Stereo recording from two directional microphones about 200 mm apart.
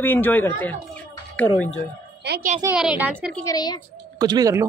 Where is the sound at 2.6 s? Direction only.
5° right (ahead or behind).